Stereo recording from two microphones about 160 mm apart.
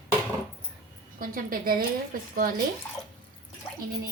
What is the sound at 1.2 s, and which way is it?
Speech, 65° right (ahead or behind).